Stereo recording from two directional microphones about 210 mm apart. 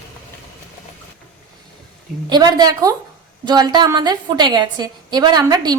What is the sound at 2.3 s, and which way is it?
A woman's voice, 20° right (ahead or behind).